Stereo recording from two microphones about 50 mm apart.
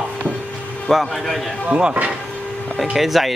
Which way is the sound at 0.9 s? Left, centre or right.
Centre.